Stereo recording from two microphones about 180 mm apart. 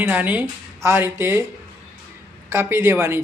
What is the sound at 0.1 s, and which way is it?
Speech, 10° right (ahead or behind).